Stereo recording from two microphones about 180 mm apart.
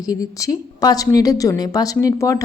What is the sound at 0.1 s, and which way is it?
A woman's voice, 20° left (ahead or behind).